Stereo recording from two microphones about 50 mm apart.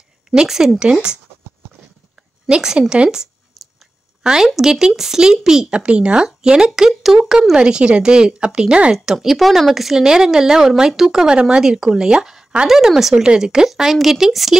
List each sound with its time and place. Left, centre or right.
0.3 s speech: centre
2.4 s a woman's voice: centre
2.9 s a sound: centre
4.2 s speech: centre
8.9 s speech: centre